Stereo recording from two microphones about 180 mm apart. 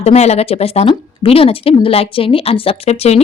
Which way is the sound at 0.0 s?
35° left (ahead or behind).